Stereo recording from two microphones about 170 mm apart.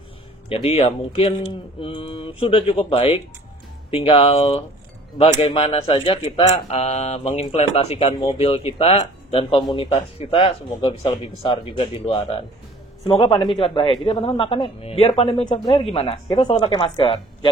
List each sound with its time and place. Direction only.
0.5 s speech: 40° left (ahead or behind)